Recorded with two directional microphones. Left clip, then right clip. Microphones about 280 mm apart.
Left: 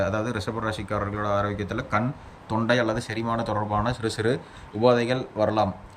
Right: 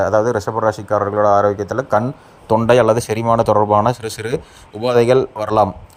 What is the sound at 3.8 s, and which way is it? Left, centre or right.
Speech, centre.